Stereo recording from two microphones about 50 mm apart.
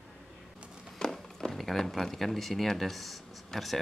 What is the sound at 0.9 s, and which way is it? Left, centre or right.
Speech, centre.